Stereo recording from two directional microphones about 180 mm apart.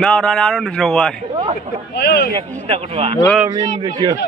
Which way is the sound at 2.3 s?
35° right (ahead or behind).